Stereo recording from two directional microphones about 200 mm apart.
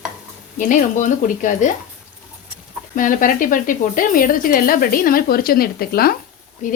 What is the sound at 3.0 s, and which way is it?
Speech, 40° left (ahead or behind).